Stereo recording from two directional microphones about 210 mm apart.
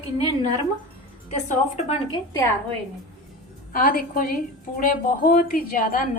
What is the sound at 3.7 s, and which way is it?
A woman's voice, 45° left (ahead or behind).